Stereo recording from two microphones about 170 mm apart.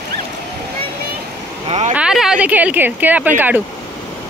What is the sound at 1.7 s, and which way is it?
Vehicle, 40° right (ahead or behind).